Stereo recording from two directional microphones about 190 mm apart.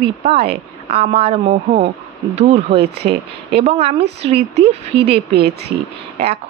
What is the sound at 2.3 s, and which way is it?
Speech, 35° right (ahead or behind).